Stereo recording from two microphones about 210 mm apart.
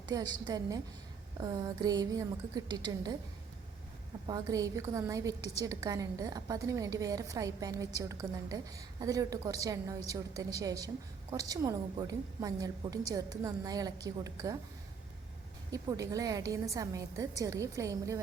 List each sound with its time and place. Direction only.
0.0 s a woman's voice: 20° right (ahead or behind)
4.3 s a woman's voice: 15° right (ahead or behind)
15.7 s a woman's voice: 15° right (ahead or behind)